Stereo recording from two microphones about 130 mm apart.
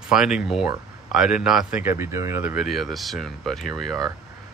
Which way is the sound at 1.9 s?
20° right (ahead or behind).